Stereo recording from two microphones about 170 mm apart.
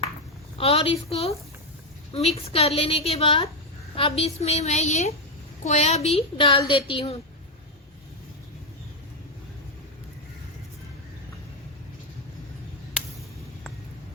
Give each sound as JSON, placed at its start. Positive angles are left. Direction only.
{"t": 0.6, "sound": "a woman's voice", "side_deg": 35}